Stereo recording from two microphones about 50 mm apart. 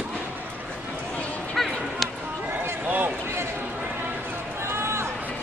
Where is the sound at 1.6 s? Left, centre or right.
Centre.